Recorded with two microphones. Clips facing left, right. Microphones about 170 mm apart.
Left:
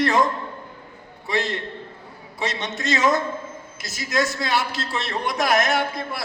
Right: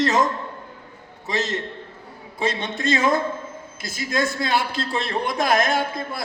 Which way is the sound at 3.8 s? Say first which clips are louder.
Even; 55° right (ahead or behind).